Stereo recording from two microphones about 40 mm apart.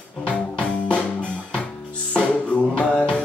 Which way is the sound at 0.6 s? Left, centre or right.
Left.